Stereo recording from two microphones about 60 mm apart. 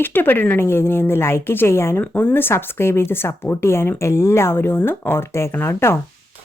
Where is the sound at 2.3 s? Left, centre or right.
Left.